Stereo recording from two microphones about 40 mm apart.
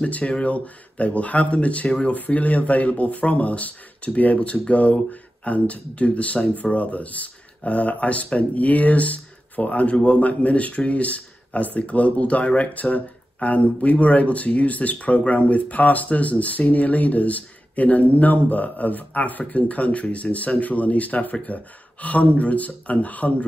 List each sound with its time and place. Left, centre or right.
0.2 s speech: left
1.9 s speech: left
2.1 s speech: left